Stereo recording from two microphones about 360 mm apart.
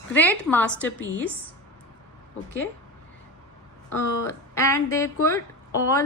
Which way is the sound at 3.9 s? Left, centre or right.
Centre.